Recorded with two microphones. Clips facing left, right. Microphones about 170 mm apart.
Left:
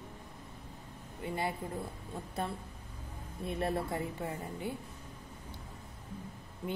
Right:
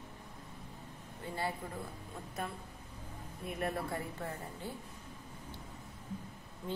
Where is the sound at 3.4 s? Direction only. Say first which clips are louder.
Left 3 dB; 30° left (ahead or behind).